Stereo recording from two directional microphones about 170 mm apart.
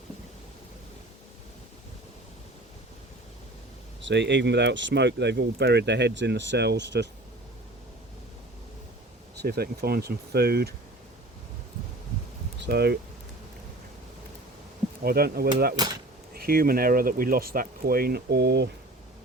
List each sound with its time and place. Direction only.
4.0 s speech: 90° right
9.4 s speech: 70° right (ahead or behind)
12.6 s speech: 75° right (ahead or behind)
15.0 s speech: 65° right (ahead or behind)
15.7 s speech: 25° right (ahead or behind)
16.3 s speech: 60° right (ahead or behind); by 18.7 s 75° right (ahead or behind)